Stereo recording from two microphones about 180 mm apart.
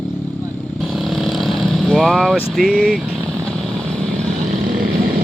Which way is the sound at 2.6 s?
55° right (ahead or behind).